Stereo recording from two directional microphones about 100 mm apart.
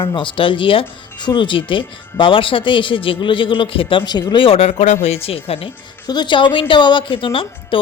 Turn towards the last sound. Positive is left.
turn(degrees=60)  # may be behind; listen again after turning